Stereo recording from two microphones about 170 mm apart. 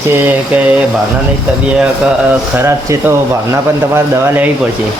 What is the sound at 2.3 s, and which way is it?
Speech, 15° right (ahead or behind).